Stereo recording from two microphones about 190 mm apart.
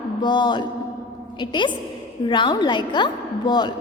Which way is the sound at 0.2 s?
25° left (ahead or behind).